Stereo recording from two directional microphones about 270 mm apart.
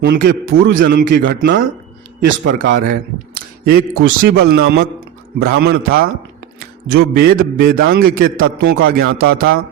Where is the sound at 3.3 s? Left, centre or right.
Right.